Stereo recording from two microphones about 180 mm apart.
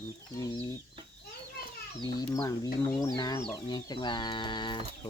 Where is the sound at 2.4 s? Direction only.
20° left (ahead or behind).